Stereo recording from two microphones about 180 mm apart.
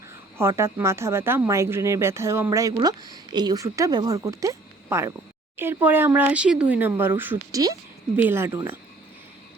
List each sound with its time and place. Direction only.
0.3 s speech: 15° right (ahead or behind)